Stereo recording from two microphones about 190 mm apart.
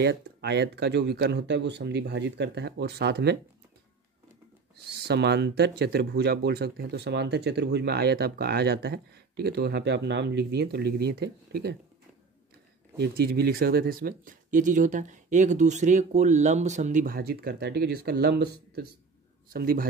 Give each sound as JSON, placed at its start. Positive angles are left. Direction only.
{"t": 0.0, "sound": "speech", "side_deg": -65}
{"t": 5.0, "sound": "speech", "side_deg": -60}
{"t": 12.9, "sound": "speech", "side_deg": -60}